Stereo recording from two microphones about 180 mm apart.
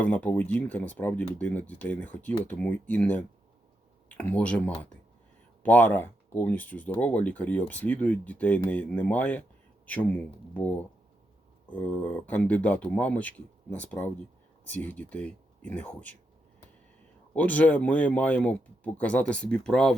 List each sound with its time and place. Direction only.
0.0 s speech: 10° left (ahead or behind)
17.3 s speech: 10° left (ahead or behind)